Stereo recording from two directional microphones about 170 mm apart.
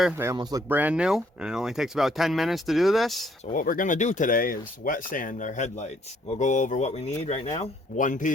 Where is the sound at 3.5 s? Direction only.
55° left (ahead or behind).